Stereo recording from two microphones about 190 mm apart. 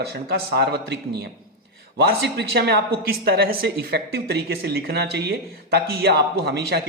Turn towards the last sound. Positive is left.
turn(degrees=-60)  # may be behind; listen again after turning